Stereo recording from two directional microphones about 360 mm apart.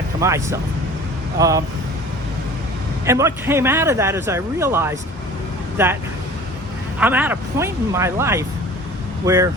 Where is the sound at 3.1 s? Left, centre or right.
Centre.